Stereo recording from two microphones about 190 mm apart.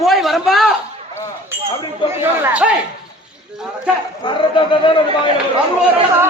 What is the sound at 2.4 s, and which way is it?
Speech, 5° right (ahead or behind).